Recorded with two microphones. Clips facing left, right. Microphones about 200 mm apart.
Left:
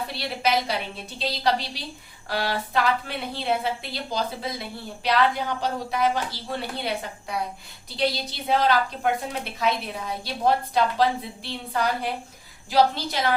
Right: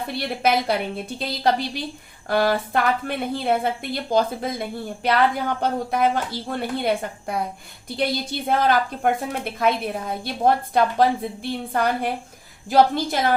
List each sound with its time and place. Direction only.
0.1 s a woman's voice: 55° right (ahead or behind)